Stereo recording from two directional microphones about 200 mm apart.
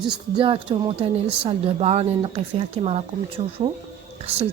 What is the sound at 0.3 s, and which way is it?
Speech, 25° right (ahead or behind).